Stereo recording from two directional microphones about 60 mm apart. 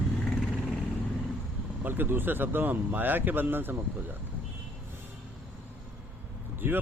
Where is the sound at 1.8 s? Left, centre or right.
Right.